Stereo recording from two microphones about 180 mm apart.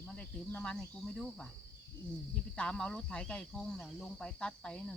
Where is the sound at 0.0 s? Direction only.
10° left (ahead or behind).